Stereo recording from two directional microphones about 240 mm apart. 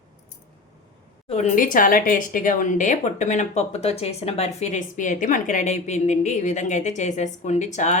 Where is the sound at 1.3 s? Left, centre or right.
Left.